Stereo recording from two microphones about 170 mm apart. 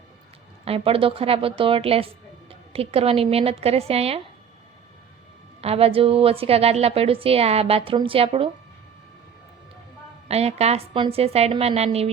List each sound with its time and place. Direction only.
0.6 s a woman's voice: 35° right (ahead or behind)
5.6 s a woman's voice: 35° right (ahead or behind)
10.2 s a woman's voice: 40° right (ahead or behind)